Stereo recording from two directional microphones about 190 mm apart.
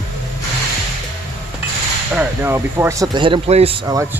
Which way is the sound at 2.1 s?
10° right (ahead or behind).